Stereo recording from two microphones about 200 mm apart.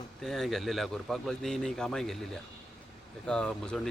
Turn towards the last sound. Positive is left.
turn(degrees=0)  # may be behind; listen again after turning